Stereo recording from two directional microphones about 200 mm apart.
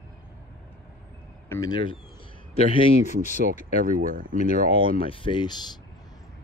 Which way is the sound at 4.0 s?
45° right (ahead or behind).